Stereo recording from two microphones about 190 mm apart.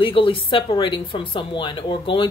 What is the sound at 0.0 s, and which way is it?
A woman's voice, 25° left (ahead or behind).